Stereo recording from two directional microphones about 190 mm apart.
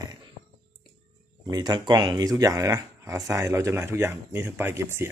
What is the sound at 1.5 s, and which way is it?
Speech, 20° right (ahead or behind).